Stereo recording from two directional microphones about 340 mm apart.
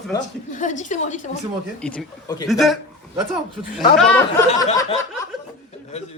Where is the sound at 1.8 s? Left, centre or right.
Centre.